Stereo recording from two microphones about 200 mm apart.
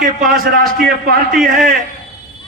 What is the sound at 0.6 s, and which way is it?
Speech, 50° right (ahead or behind).